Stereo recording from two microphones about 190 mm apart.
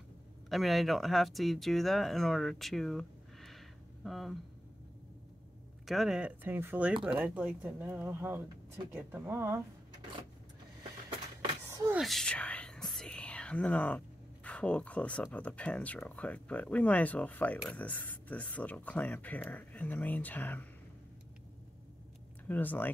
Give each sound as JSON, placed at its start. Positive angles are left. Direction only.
{"t": 0.5, "sound": "speech", "side_deg": 0}
{"t": 5.9, "sound": "speech", "side_deg": 0}
{"t": 10.8, "sound": "a sound", "side_deg": -25}
{"t": 12.0, "sound": "whispering", "side_deg": 0}
{"t": 15.3, "sound": "speech", "side_deg": 5}
{"t": 22.5, "sound": "speech", "side_deg": 10}